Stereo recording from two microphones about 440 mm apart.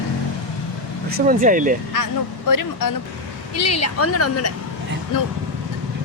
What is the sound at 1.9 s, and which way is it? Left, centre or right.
A woman's voice, left.